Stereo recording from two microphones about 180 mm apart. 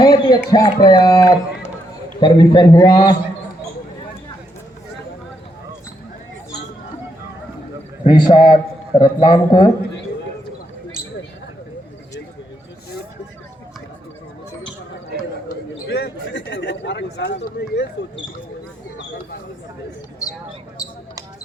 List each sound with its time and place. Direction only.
0.0 s speech: 20° left (ahead or behind)
8.0 s speech: 25° left (ahead or behind)
15.9 s a man's voice: 70° left (ahead or behind)
20.8 s basketball bounce: 20° left (ahead or behind)